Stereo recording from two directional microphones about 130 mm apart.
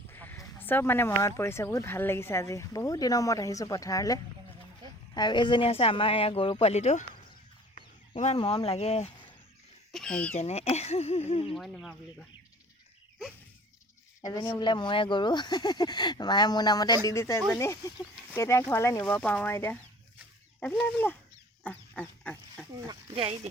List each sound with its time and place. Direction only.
0.1 s a woman's voice: 15° left (ahead or behind); by 8.4 s 60° left (ahead or behind)
8.4 s a woman's voice: 45° left (ahead or behind)
9.9 s speech: 5° left (ahead or behind)
10.3 s a woman's voice: 55° left (ahead or behind)
11.5 s speech: centre (ahead or behind)
14.2 s speech: 30° left (ahead or behind)
21.6 s pig: 15° left (ahead or behind)
23.1 s speech: 45° right (ahead or behind)